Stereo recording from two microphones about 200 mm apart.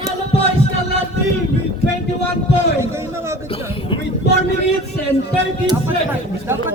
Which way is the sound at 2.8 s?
15° right (ahead or behind).